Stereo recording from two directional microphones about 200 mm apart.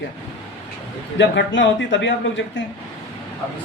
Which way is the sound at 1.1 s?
65° left (ahead or behind).